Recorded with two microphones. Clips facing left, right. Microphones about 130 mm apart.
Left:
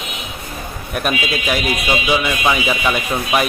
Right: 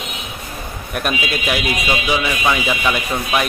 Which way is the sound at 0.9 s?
Centre (ahead or behind).